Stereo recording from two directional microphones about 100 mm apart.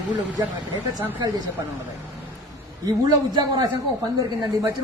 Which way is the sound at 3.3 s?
40° right (ahead or behind).